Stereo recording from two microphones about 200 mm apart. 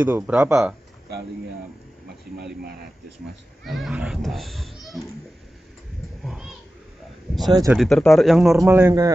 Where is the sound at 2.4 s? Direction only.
50° right (ahead or behind).